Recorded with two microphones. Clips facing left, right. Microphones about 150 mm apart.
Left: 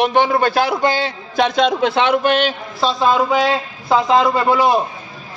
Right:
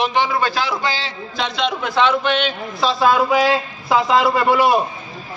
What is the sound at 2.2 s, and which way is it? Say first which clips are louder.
Speech: left 4 dB; 45° left (ahead or behind).